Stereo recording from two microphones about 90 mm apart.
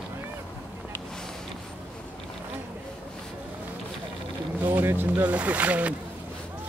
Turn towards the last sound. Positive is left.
turn(degrees=-15)  # may be behind; listen again after turning